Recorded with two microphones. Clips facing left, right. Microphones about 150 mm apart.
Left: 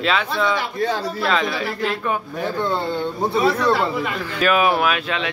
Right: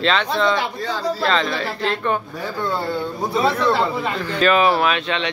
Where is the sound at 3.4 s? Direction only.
30° right (ahead or behind).